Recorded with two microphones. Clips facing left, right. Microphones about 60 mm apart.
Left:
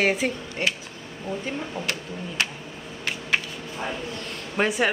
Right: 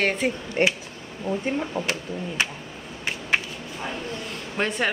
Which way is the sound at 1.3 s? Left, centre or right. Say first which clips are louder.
Right 4 dB; centre.